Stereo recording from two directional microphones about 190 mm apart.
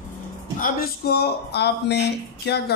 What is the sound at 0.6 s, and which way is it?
A man's voice, 50° left (ahead or behind).